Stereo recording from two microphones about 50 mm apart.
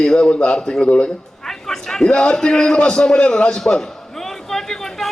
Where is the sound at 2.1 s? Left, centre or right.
Left.